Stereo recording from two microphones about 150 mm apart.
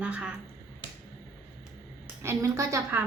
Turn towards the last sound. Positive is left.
turn(degrees=-15)  # may be behind; listen again after turning